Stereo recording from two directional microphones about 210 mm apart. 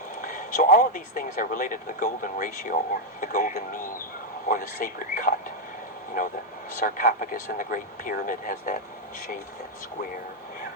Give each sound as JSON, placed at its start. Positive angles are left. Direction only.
{"t": 0.2, "sound": "speech", "side_deg": 40}